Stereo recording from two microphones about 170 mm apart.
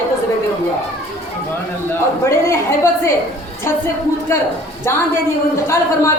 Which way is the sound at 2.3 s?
15° left (ahead or behind).